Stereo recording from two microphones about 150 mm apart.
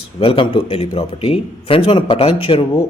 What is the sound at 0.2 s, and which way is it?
A man's voice, 35° left (ahead or behind).